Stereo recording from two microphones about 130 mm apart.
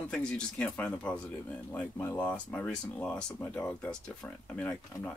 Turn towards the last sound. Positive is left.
turn(degrees=10)  # may be behind; listen again after turning